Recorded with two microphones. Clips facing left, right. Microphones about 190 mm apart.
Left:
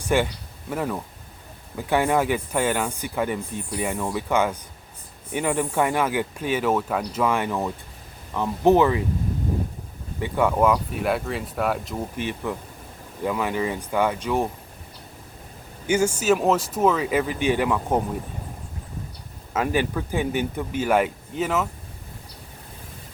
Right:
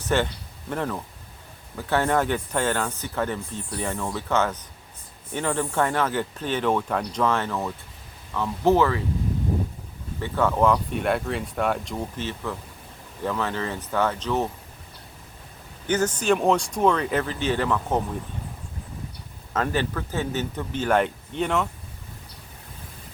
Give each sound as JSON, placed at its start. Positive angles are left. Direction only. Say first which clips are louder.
{"t": 0.0, "sound": "speech", "louder": "left 2 dB", "side_deg": 10}
{"t": 10.2, "sound": "speech", "louder": "left 1 dB", "side_deg": 15}
{"t": 12.1, "sound": "speech", "louder": "left 3 dB", "side_deg": 15}
{"t": 15.9, "sound": "speech", "louder": "left 2 dB", "side_deg": 10}
{"t": 19.5, "sound": "speech", "louder": "left 2 dB", "side_deg": 10}